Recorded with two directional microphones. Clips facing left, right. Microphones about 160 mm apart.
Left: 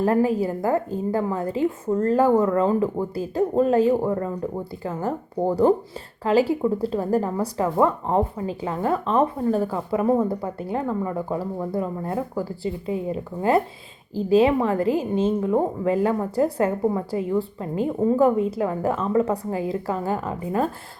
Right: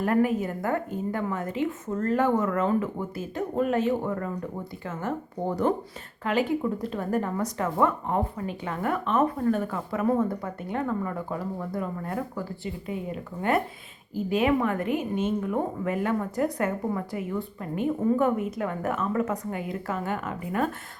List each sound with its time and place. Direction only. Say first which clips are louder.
0.0 s speech: left 4 dB; 30° left (ahead or behind)